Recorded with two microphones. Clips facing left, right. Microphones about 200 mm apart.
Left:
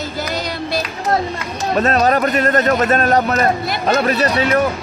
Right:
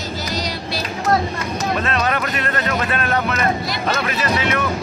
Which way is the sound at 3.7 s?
40° left (ahead or behind).